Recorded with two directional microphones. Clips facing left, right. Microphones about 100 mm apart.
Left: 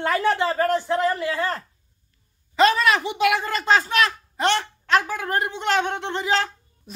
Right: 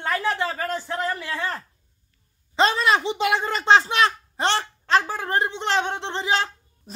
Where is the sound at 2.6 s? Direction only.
30° right (ahead or behind).